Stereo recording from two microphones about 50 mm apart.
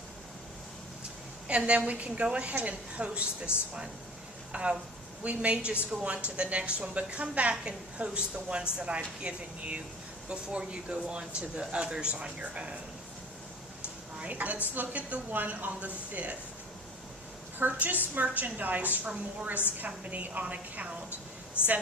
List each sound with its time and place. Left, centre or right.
1.5 s a woman's voice: right
4.5 s a woman's voice: right
14.2 s a woman's voice: right
17.6 s a woman's voice: right
21.6 s speech: left